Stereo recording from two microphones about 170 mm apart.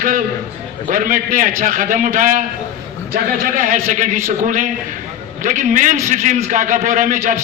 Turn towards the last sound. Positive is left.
turn(degrees=-50)  # may be behind; listen again after turning